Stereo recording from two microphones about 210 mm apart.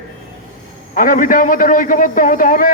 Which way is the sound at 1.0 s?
40° left (ahead or behind).